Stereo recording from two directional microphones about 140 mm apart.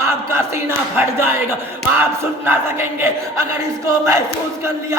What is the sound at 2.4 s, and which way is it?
Speech, 15° right (ahead or behind).